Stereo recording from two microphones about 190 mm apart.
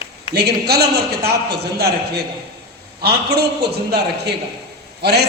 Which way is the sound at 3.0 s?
60° right (ahead or behind).